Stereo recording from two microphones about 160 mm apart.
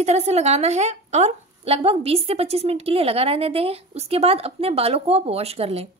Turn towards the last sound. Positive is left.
turn(degrees=-40)  # may be behind; listen again after turning